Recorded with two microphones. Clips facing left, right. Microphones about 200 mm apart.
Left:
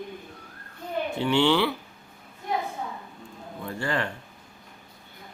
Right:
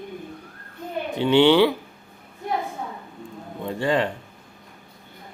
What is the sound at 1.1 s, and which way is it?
Speech, 20° right (ahead or behind).